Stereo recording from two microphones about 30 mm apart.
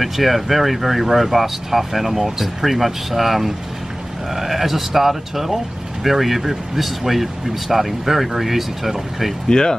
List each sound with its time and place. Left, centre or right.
0.0 s speech: centre
9.5 s speech: left